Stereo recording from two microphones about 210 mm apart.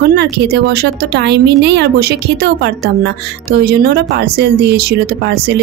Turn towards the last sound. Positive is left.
turn(degrees=-50)  # may be behind; listen again after turning